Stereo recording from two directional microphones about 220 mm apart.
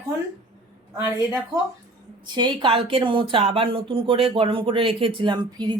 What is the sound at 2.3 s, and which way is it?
Speech, 20° right (ahead or behind).